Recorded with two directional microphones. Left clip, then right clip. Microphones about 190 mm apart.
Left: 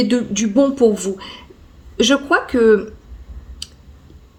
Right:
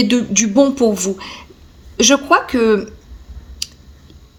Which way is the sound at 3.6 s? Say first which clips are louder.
Right 6 dB; 35° right (ahead or behind).